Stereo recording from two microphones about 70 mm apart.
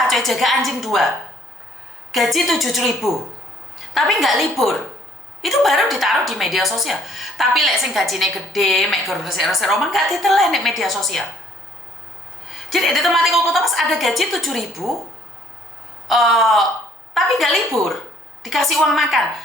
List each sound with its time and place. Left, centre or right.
0.1 s a woman's voice: centre
2.1 s a woman's voice: centre
12.5 s a woman's voice: centre
16.0 s a woman's voice: centre